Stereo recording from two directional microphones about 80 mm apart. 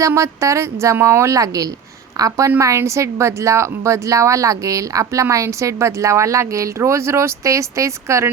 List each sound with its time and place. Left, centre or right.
0.0 s a woman's voice: right